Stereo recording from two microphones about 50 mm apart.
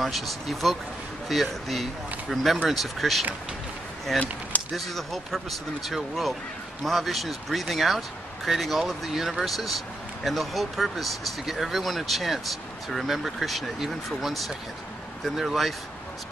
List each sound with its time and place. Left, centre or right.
0.0 s speech: centre
4.2 s a sound: left
4.7 s speech: centre